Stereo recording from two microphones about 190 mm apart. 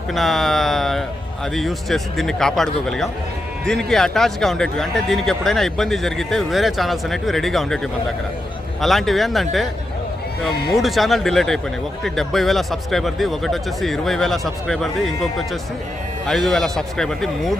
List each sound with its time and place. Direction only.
0.1 s speech: centre (ahead or behind)
8.8 s speech: centre (ahead or behind)
10.5 s speech: 55° left (ahead or behind)
10.8 s speech: centre (ahead or behind)